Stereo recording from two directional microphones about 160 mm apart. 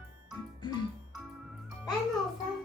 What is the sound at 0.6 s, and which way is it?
Music, 30° left (ahead or behind).